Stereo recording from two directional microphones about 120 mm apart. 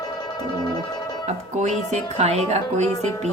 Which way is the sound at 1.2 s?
75° right (ahead or behind).